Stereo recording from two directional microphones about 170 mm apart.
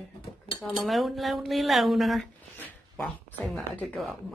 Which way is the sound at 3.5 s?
Centre (ahead or behind).